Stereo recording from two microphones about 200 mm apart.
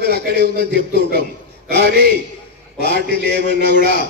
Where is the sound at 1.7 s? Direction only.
55° right (ahead or behind).